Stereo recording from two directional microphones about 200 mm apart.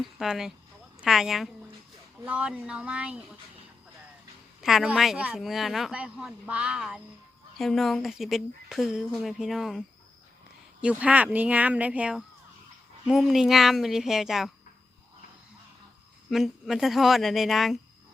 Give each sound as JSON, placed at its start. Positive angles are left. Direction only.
{"t": 0.0, "sound": "speech", "side_deg": 0}
{"t": 4.6, "sound": "speech", "side_deg": 0}
{"t": 16.3, "sound": "speech", "side_deg": 0}